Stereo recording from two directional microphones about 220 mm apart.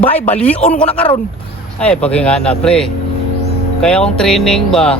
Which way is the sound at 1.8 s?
5° left (ahead or behind).